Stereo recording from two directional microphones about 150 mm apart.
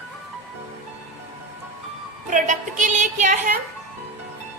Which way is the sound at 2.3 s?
55° right (ahead or behind).